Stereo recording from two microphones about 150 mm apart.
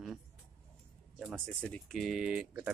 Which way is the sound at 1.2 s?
5° left (ahead or behind).